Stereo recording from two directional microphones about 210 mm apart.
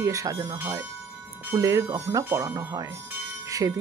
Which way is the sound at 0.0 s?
15° right (ahead or behind).